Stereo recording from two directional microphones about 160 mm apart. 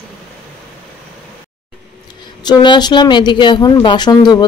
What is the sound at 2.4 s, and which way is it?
Speech, 25° left (ahead or behind).